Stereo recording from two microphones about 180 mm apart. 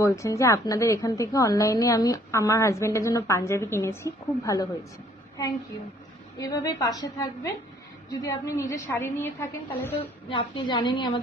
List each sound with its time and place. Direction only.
0.0 s a woman's voice: 15° left (ahead or behind)
6.3 s a woman's voice: 20° left (ahead or behind)
10.3 s a woman's voice: 25° left (ahead or behind)